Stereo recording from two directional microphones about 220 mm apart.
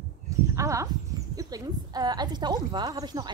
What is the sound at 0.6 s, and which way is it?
A woman's voice, 15° right (ahead or behind).